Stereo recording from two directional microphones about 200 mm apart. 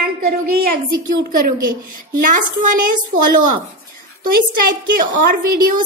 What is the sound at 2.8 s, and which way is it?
Female singing, 40° right (ahead or behind).